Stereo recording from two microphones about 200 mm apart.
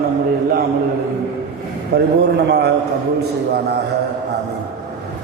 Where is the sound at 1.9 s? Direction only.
55° right (ahead or behind).